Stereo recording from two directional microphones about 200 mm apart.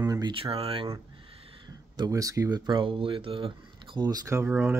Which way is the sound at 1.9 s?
20° right (ahead or behind).